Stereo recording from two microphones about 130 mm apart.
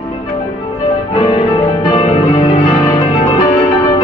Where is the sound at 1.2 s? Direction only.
40° left (ahead or behind).